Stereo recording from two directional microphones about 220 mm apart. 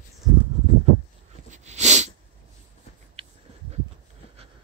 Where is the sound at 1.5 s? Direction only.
30° right (ahead or behind).